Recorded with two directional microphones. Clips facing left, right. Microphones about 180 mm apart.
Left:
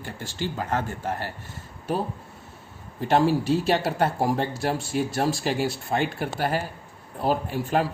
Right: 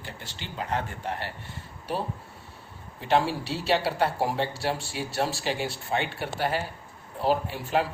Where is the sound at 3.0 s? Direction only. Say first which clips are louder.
Left 4 dB; 45° left (ahead or behind).